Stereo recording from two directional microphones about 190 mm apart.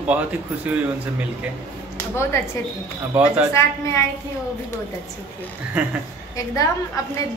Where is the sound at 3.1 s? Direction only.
10° right (ahead or behind).